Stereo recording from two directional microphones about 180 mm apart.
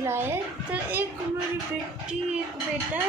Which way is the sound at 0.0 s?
15° right (ahead or behind).